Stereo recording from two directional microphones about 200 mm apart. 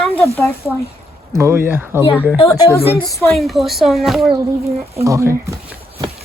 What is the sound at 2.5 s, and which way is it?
Speech, 15° left (ahead or behind).